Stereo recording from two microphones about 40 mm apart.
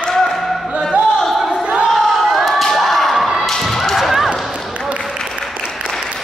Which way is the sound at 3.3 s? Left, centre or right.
Centre.